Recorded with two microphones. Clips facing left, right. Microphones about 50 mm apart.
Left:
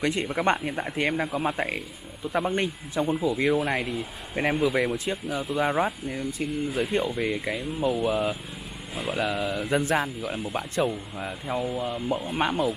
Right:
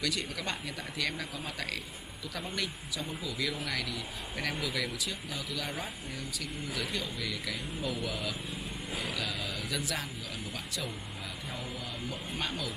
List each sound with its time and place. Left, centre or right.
0.0 s speech: left